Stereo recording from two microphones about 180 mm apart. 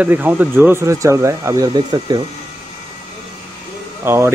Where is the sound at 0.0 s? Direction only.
10° right (ahead or behind).